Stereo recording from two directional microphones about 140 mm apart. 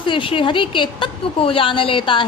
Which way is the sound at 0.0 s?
35° left (ahead or behind).